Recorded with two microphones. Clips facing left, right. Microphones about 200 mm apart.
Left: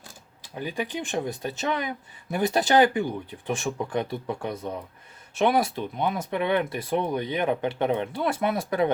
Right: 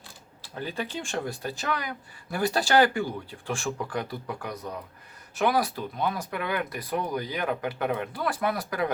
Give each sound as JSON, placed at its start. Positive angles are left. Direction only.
{"t": 0.5, "sound": "speech", "side_deg": 15}